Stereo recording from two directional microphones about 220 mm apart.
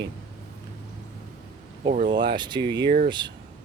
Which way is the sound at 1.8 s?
35° right (ahead or behind).